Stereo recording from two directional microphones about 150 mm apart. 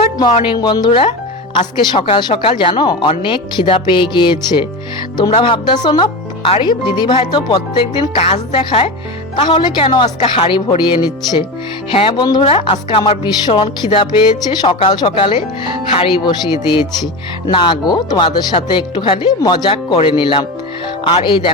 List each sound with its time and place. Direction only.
0.2 s speech: 30° left (ahead or behind)